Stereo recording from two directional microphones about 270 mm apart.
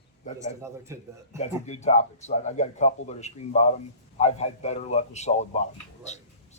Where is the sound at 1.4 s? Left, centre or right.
Left.